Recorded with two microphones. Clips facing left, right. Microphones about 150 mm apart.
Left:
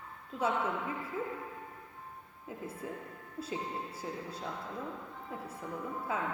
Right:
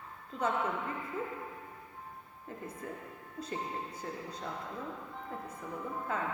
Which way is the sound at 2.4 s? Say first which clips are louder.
Left 1 dB; 5° left (ahead or behind).